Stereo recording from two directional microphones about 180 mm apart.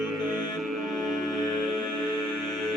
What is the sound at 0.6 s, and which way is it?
Music, centre (ahead or behind).